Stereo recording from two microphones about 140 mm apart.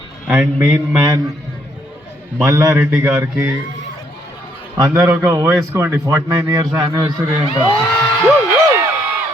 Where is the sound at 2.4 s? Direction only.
20° right (ahead or behind).